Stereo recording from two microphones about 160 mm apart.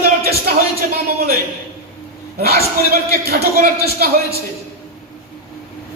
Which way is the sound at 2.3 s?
75° right (ahead or behind).